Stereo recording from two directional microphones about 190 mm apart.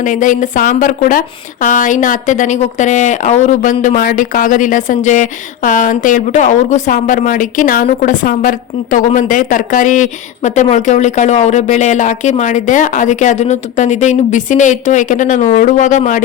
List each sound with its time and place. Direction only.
0.0 s a woman's voice: 45° left (ahead or behind)